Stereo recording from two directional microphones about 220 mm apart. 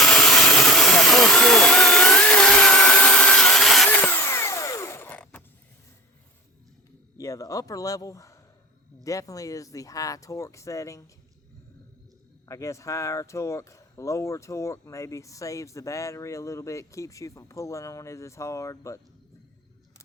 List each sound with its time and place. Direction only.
0.0 s a sound: centre (ahead or behind)
7.2 s speech: 15° left (ahead or behind)
12.5 s speech: 15° left (ahead or behind)